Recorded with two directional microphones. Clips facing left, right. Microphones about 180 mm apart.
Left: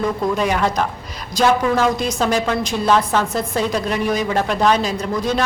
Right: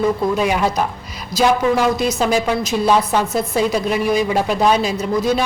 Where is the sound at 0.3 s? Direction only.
10° right (ahead or behind).